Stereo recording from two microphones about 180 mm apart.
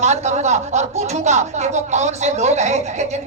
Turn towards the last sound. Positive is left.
turn(degrees=-40)  # may be behind; listen again after turning